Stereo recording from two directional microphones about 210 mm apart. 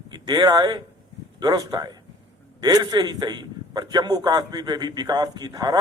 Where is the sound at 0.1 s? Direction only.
20° right (ahead or behind).